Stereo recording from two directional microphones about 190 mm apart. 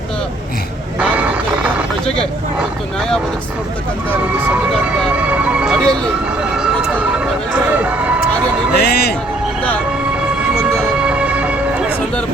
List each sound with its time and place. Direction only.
0.9 s vehicle: 5° right (ahead or behind)
4.9 s emergency vehicle: 5° right (ahead or behind)
7.7 s a sound: 10° right (ahead or behind)
8.7 s a man's voice: 55° left (ahead or behind)
10.5 s music: 5° right (ahead or behind)